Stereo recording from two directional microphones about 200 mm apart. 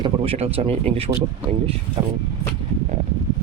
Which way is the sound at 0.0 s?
30° right (ahead or behind).